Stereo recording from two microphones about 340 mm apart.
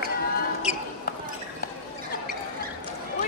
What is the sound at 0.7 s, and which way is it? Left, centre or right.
Basketball bounce, centre.